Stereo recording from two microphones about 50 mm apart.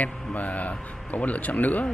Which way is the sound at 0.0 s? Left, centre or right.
Left.